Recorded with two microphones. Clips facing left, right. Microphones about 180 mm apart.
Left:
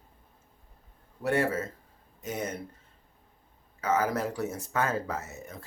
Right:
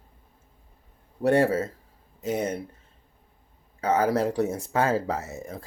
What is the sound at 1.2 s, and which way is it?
Speech, 35° right (ahead or behind).